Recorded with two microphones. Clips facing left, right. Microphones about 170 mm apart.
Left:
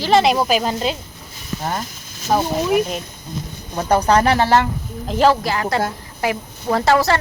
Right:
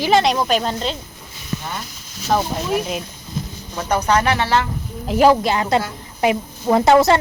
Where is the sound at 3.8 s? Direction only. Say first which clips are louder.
Left 3 dB; 35° left (ahead or behind).